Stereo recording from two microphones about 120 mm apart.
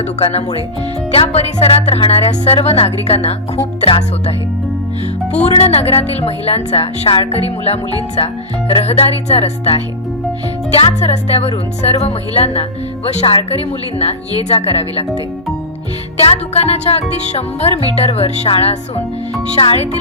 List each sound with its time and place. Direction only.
0.0 s speech: 55° left (ahead or behind)
3.8 s music: 55° left (ahead or behind)
5.5 s speech: 60° left (ahead or behind)
10.8 s speech: 60° left (ahead or behind)
16.1 s speech: 60° left (ahead or behind)